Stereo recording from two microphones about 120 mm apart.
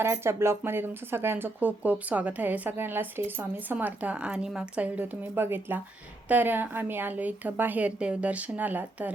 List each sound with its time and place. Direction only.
0.0 s speech: 20° right (ahead or behind)